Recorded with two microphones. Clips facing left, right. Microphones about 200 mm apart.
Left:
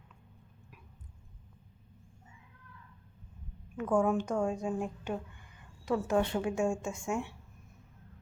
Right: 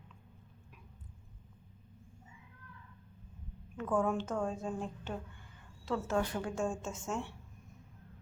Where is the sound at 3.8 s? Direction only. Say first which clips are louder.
Left 4 dB; 10° left (ahead or behind).